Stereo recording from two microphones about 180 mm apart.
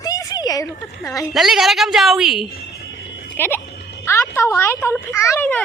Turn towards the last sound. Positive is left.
turn(degrees=10)  # may be behind; listen again after turning